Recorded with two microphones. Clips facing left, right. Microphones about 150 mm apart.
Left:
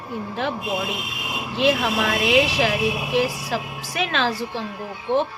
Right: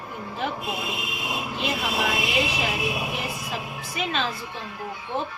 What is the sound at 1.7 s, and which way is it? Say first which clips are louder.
A woman's voice: left 6 dB; 90° left.